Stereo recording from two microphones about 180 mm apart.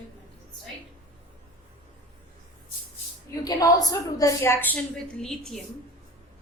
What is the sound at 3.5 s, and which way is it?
A woman's voice, 20° left (ahead or behind).